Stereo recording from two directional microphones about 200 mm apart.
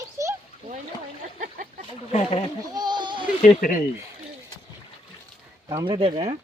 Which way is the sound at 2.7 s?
20° right (ahead or behind).